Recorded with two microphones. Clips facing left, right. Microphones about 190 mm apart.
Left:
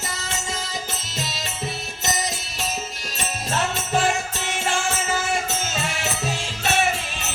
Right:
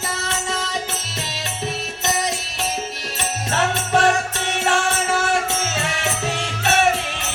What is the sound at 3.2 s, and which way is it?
Music, 70° right (ahead or behind).